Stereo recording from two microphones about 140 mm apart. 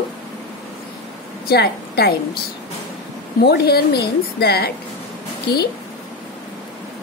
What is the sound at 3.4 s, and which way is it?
A woman's voice, 90° left.